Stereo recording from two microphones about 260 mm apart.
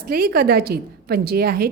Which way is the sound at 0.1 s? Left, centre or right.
Right.